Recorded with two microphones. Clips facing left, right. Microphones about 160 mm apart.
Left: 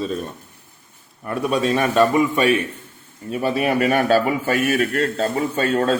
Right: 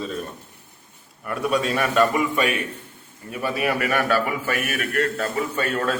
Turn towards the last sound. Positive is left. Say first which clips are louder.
# left 5 dB
turn(degrees=25)  # may be behind; listen again after turning